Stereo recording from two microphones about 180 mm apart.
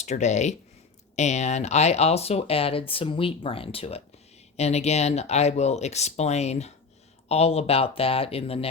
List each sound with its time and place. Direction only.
0.0 s speech: 40° left (ahead or behind)